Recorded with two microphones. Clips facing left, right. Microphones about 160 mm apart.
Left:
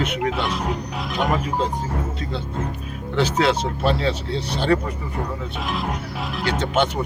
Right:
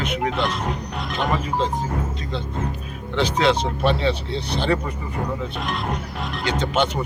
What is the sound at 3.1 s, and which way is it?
Bird, 5° left (ahead or behind).